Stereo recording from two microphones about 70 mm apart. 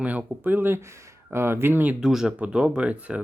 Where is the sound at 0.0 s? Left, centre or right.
Right.